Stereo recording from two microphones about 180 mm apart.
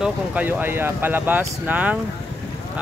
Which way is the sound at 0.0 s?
10° right (ahead or behind).